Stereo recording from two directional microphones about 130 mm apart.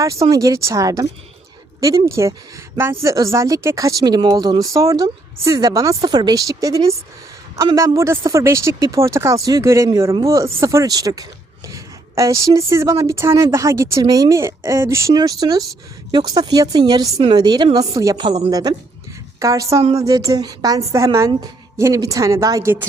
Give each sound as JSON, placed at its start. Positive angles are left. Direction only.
{"t": 0.0, "sound": "speech", "side_deg": -25}
{"t": 15.1, "sound": "speech", "side_deg": -30}
{"t": 18.2, "sound": "speech", "side_deg": -40}
{"t": 19.4, "sound": "speech", "side_deg": -25}